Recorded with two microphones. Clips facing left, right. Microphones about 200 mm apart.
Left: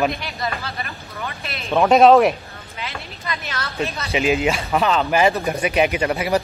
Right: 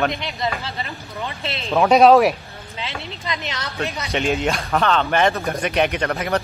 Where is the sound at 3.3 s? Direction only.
20° right (ahead or behind).